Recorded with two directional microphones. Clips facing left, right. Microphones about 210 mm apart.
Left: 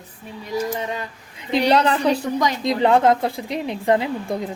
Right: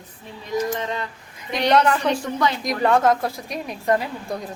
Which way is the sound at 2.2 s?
15° left (ahead or behind).